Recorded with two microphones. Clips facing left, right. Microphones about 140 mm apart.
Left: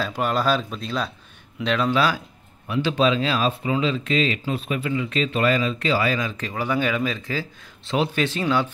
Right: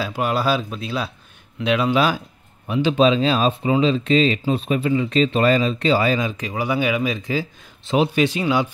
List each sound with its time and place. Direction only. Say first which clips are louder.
0.0 s speech: right 1 dB; 5° right (ahead or behind)